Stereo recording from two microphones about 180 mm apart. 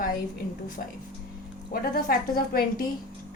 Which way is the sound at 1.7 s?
55° left (ahead or behind).